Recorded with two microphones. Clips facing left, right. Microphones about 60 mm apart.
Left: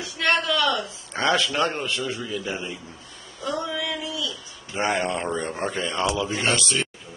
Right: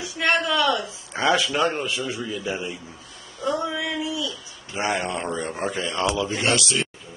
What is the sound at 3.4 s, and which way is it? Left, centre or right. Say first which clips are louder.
Speech: right 2 dB; centre.